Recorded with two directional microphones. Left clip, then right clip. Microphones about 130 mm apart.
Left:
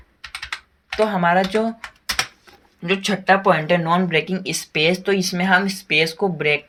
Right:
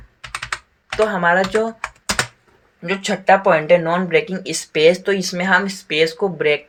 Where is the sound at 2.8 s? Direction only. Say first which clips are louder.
Right 2 dB; 25° left (ahead or behind).